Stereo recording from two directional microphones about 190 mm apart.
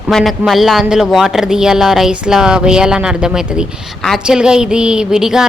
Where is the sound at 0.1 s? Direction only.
Centre (ahead or behind).